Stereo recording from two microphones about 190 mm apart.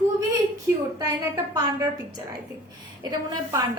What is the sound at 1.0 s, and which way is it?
Speech, 15° right (ahead or behind).